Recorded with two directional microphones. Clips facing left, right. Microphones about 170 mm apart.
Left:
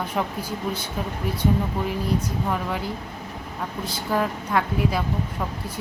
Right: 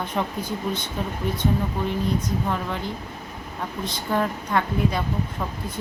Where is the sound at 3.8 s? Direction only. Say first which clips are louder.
Even; 5° left (ahead or behind).